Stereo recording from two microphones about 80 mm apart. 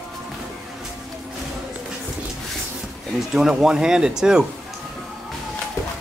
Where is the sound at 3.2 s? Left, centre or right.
Centre.